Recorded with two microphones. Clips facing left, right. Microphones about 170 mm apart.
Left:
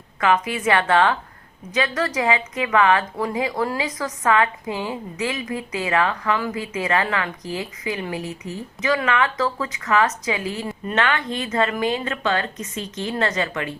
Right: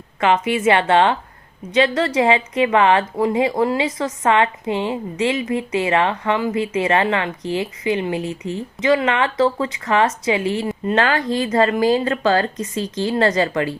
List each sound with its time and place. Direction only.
0.2 s speech: 25° right (ahead or behind)